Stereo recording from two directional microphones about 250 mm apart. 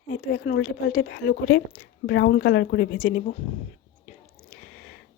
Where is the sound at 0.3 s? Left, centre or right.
Left.